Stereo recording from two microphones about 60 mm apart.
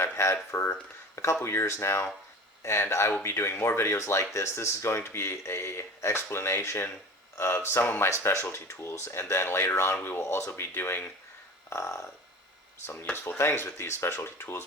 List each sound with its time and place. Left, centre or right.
0.2 s speech: left
11.7 s frog: left
13.4 s speech: left